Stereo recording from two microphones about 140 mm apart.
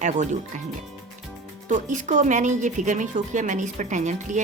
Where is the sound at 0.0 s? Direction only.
60° right (ahead or behind).